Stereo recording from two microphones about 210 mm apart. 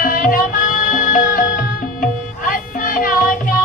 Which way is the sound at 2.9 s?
40° left (ahead or behind).